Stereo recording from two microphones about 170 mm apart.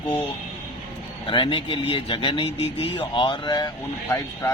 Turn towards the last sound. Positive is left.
turn(degrees=20)  # may be behind; listen again after turning